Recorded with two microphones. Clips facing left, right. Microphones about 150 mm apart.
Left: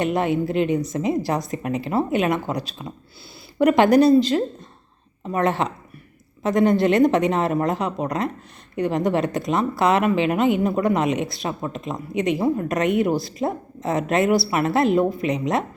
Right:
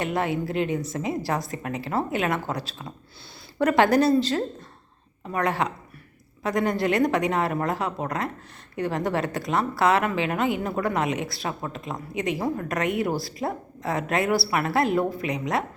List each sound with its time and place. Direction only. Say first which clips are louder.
0.0 s a woman's voice: left 5 dB; 20° left (ahead or behind)